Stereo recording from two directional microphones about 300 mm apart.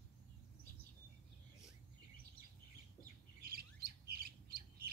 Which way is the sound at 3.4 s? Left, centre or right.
Right.